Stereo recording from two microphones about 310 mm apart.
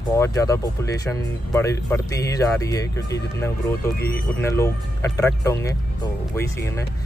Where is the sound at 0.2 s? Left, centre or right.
Centre.